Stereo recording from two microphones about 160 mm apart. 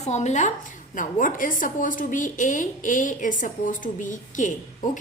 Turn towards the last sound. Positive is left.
turn(degrees=50)  # may be behind; listen again after turning